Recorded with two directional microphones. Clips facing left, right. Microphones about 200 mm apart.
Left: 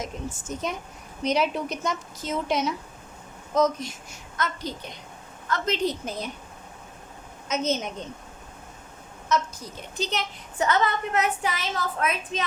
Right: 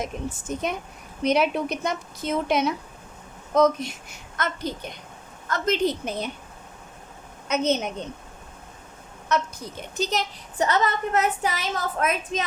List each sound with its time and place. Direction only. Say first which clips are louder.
0.0 s a woman's voice: right 3 dB; 60° right (ahead or behind)
7.4 s a woman's voice: right 3 dB; 65° right (ahead or behind)
9.3 s a woman's voice: right 1 dB; 60° right (ahead or behind)
10.7 s a woman's voice: even; 40° right (ahead or behind)